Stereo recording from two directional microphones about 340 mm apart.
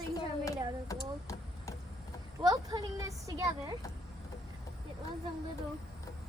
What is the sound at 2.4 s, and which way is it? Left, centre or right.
Speech, centre.